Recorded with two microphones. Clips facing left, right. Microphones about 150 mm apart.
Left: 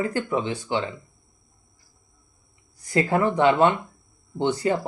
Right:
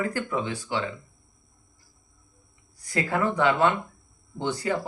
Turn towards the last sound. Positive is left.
turn(degrees=25)  # may be behind; listen again after turning